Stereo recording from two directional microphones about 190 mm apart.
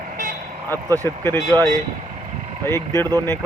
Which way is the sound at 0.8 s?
15° right (ahead or behind).